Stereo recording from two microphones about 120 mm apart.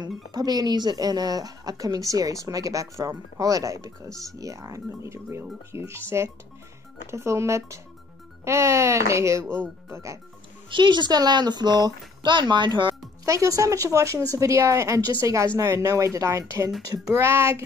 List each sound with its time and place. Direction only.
0.3 s a woman's voice: 35° right (ahead or behind)
10.7 s a woman's voice: 40° right (ahead or behind)
13.2 s speech: 25° right (ahead or behind)